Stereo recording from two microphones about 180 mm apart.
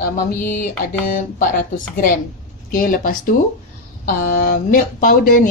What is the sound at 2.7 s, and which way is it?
Speech, 50° left (ahead or behind).